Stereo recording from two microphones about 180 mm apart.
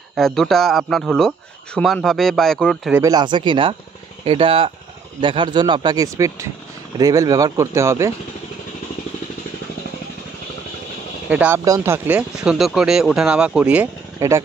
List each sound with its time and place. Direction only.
0.1 s speech: centre (ahead or behind)
2.9 s speech: 20° right (ahead or behind)
11.2 s speech: 10° right (ahead or behind)